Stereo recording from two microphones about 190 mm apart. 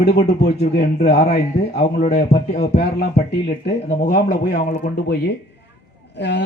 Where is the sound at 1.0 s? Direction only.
35° left (ahead or behind).